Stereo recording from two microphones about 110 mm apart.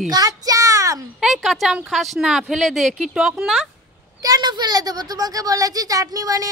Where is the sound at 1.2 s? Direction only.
Centre (ahead or behind).